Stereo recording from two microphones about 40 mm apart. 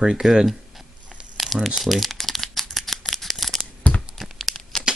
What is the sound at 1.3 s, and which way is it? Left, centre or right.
Crumpling, centre.